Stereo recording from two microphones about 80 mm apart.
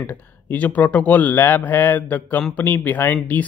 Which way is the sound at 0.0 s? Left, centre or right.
Left.